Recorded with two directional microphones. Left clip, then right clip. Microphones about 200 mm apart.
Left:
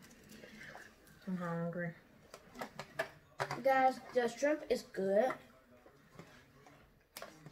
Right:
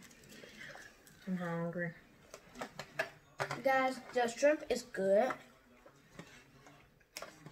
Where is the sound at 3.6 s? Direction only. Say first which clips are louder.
Left 2 dB; 15° right (ahead or behind).